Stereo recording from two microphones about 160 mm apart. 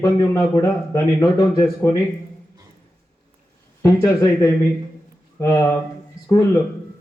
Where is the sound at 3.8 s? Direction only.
20° left (ahead or behind).